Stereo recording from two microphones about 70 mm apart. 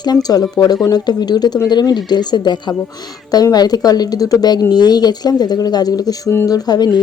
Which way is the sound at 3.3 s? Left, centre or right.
Left.